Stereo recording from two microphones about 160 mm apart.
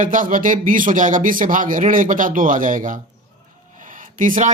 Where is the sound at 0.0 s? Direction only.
55° right (ahead or behind).